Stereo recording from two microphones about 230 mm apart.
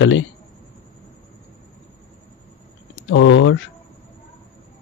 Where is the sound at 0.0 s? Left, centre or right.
Left.